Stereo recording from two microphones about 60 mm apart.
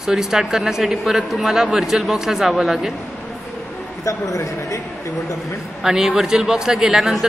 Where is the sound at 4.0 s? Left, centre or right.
Left.